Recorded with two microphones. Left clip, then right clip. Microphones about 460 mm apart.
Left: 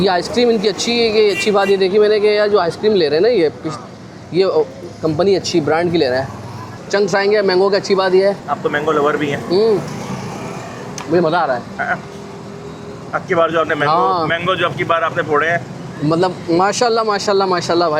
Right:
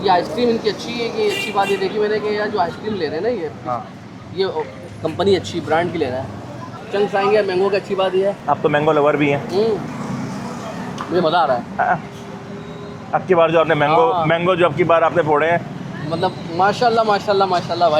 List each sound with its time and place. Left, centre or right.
0.0 s speech: left
5.4 s speech: left
8.4 s speech: right
11.1 s speech: left
11.8 s speech: right
13.1 s speech: right
13.9 s speech: left
14.3 s speech: right
16.1 s speech: left